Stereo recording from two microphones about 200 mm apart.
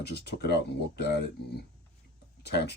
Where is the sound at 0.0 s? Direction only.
55° left (ahead or behind).